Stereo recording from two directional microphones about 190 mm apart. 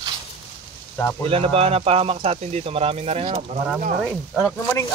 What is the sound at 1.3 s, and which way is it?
Speech, 30° right (ahead or behind).